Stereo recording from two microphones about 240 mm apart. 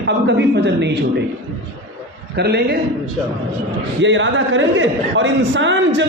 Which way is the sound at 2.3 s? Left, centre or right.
Right.